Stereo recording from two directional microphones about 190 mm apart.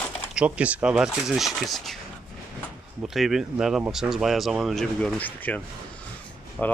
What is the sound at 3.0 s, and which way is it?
Speech, centre (ahead or behind).